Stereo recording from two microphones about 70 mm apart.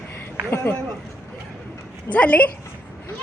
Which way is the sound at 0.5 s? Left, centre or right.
Left.